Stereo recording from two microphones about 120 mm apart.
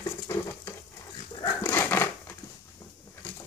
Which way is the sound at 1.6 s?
20° left (ahead or behind).